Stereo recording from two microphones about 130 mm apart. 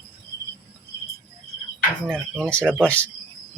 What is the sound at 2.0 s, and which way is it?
Speech, 5° left (ahead or behind).